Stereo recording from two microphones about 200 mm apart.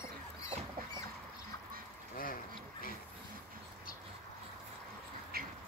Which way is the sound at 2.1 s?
45° left (ahead or behind).